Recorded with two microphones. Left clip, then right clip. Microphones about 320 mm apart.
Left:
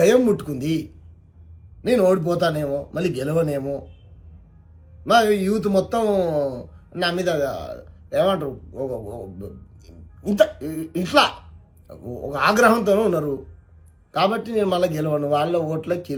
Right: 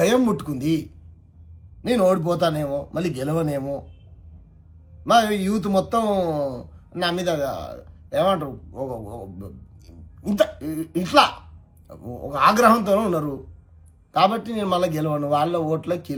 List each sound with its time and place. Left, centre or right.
0.0 s a man's voice: centre
5.0 s speech: centre